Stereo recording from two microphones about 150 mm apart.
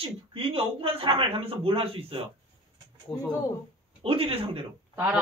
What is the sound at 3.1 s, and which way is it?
Speech, 10° left (ahead or behind).